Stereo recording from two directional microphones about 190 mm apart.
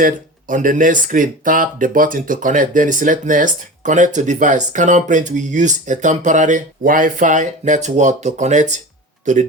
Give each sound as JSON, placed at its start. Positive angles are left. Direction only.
{"t": 0.0, "sound": "speech", "side_deg": -45}